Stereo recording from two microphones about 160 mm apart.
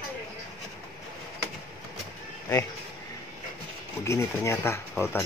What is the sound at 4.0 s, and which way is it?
Speech, 15° left (ahead or behind).